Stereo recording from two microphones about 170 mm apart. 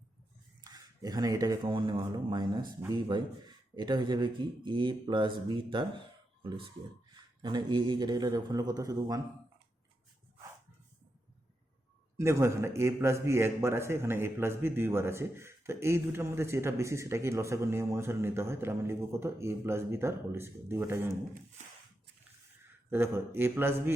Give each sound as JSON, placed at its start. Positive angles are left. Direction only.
{"t": 0.6, "sound": "speech", "side_deg": -20}
{"t": 12.1, "sound": "a man's voice", "side_deg": -15}
{"t": 22.9, "sound": "a man's voice", "side_deg": -15}